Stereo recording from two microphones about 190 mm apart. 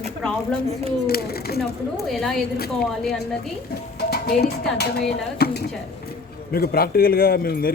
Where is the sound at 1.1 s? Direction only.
55° left (ahead or behind).